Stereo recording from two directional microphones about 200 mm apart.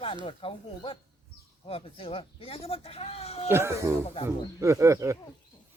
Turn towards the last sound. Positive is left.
turn(degrees=-15)  # may be behind; listen again after turning